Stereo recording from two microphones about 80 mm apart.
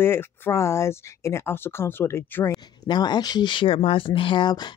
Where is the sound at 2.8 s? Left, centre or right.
Left.